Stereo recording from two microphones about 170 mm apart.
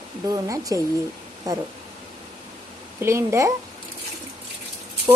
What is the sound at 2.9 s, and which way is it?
Speech, 15° right (ahead or behind).